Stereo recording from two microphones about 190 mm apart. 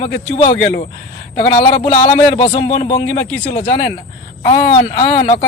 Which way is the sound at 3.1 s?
70° left (ahead or behind).